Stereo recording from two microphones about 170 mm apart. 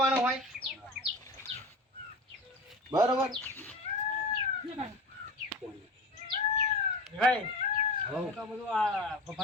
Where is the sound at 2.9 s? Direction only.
25° right (ahead or behind).